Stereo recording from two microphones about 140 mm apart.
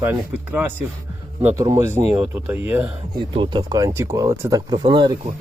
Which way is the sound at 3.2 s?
35° right (ahead or behind).